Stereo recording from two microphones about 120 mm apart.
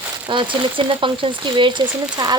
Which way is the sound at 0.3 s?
40° right (ahead or behind).